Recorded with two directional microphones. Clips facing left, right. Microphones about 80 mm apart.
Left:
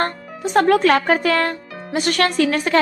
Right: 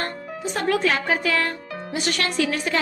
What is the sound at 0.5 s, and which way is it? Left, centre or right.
A woman's voice, left.